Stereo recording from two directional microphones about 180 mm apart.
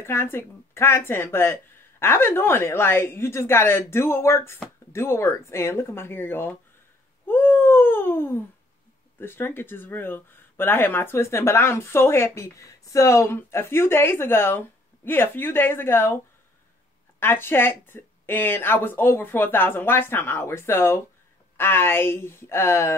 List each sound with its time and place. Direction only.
0.0 s speech: 15° left (ahead or behind)
7.2 s a sound: 10° left (ahead or behind)
9.2 s speech: 10° left (ahead or behind)
17.2 s speech: 10° left (ahead or behind)